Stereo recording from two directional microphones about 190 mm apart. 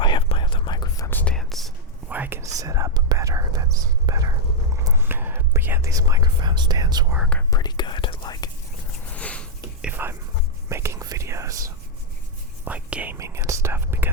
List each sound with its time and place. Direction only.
0.0 s whispering: 25° left (ahead or behind); by 7.0 s 20° right (ahead or behind)
7.5 s whispering: 20° left (ahead or behind)
9.0 s a sound: 5° left (ahead or behind)
9.8 s whispering: 10° right (ahead or behind)